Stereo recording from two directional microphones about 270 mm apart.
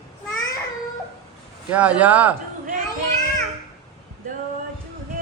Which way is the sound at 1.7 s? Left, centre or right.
Centre.